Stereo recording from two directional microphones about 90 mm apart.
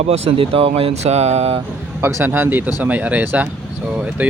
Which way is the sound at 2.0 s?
25° right (ahead or behind).